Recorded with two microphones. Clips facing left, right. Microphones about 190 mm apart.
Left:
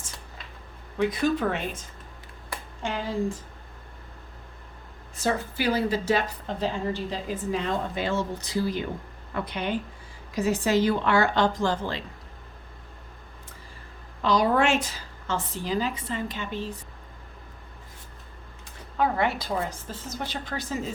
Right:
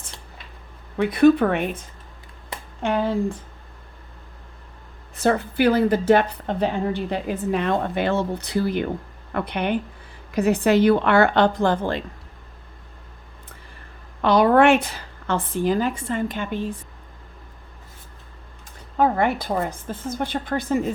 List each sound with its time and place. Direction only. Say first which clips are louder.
0.9 s a woman's voice: right 9 dB; 60° right (ahead or behind)
2.8 s a woman's voice: right 9 dB; 60° right (ahead or behind)
5.1 s a woman's voice: right 7 dB; 60° right (ahead or behind)
14.2 s a woman's voice: right 7 dB; 60° right (ahead or behind)
18.9 s a woman's voice: right 5 dB; 45° right (ahead or behind)